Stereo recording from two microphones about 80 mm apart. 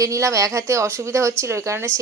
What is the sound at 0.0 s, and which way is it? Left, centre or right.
Speech, right.